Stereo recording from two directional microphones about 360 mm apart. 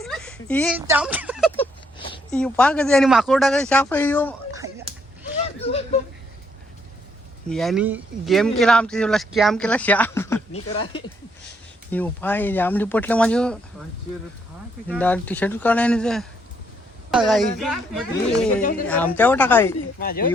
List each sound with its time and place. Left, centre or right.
0.0 s a sound: centre
2.3 s speech: centre
5.5 s a sound: centre
7.5 s speech: centre
14.8 s speech: centre
20.0 s speech: left